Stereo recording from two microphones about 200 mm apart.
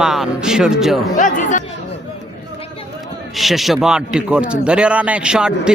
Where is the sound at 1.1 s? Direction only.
40° left (ahead or behind).